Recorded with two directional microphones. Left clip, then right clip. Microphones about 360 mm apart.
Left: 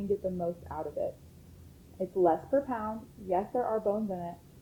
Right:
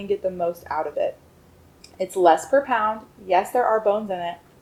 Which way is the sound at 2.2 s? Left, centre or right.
Centre.